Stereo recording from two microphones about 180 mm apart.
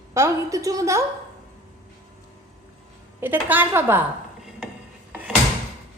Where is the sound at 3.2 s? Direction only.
10° right (ahead or behind).